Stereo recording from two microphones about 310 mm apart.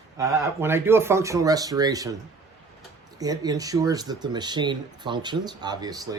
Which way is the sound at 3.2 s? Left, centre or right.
Centre.